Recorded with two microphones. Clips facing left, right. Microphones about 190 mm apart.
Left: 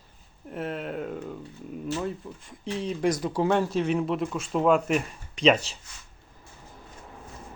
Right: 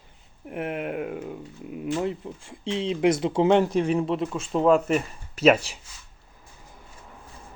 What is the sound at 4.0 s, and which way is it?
Speech, centre (ahead or behind).